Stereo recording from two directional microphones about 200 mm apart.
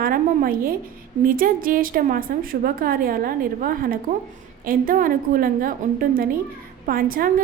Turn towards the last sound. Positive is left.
turn(degrees=-45)  # may be behind; listen again after turning